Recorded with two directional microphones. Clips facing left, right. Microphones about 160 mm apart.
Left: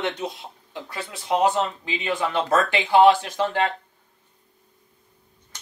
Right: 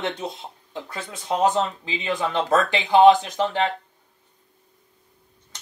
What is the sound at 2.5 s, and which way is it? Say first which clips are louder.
Speech: right 1 dB; 20° right (ahead or behind).